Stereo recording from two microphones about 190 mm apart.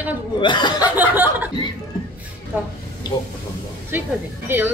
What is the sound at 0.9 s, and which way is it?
Speech, 10° right (ahead or behind).